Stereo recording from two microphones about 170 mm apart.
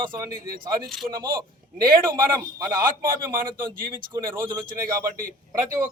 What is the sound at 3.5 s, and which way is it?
Speech, 55° right (ahead or behind).